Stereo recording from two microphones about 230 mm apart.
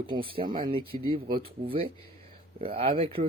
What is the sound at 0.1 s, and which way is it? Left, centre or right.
Speech, right.